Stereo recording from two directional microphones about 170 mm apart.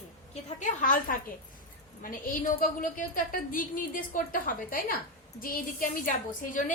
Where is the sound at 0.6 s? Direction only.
50° left (ahead or behind).